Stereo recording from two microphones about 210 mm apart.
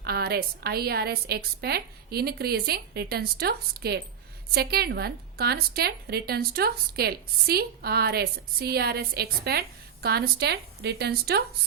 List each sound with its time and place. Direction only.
0.0 s a woman's voice: 50° right (ahead or behind)